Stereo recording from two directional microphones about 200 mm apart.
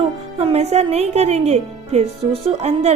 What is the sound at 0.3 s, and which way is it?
A woman's voice, 30° right (ahead or behind).